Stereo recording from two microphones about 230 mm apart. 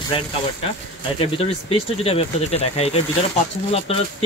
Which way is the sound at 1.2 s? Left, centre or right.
Left.